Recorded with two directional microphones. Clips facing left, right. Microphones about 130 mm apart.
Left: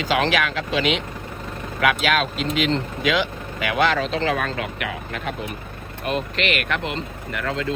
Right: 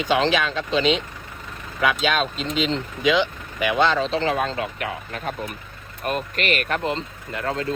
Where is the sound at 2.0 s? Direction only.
30° right (ahead or behind).